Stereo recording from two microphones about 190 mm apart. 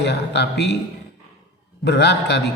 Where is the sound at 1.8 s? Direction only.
65° left (ahead or behind).